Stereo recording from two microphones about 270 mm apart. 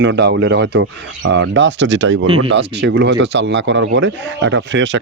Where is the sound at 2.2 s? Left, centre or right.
Centre.